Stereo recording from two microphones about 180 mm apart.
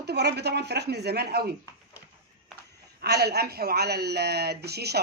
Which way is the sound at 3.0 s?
65° right (ahead or behind).